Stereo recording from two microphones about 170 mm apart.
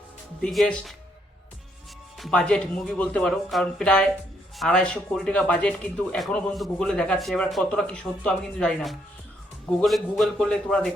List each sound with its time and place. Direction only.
0.4 s speech: centre (ahead or behind)
2.1 s speech: centre (ahead or behind)